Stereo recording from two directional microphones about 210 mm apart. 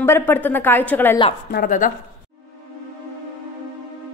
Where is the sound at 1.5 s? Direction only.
45° left (ahead or behind).